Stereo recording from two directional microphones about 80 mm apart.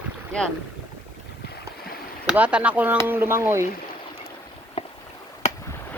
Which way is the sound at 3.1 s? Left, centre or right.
Right.